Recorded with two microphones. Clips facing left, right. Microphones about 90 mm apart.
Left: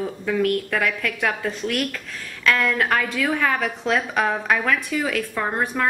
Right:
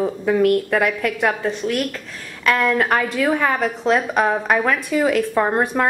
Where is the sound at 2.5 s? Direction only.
20° right (ahead or behind).